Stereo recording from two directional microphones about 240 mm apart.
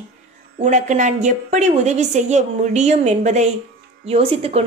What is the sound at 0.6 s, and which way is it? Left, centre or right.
A woman's voice, right.